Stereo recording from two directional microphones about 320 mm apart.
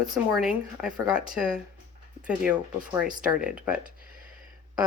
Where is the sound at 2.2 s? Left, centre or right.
Centre.